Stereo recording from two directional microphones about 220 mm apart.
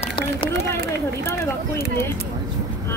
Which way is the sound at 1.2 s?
10° left (ahead or behind).